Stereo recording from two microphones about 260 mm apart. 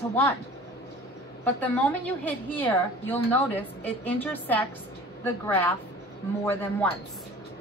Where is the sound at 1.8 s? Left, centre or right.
Centre.